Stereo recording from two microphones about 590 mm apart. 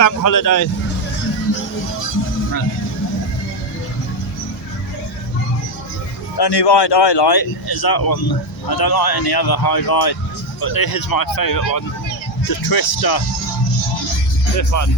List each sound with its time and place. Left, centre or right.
0.0 s speech: left
6.3 s speech: left
14.5 s speech: left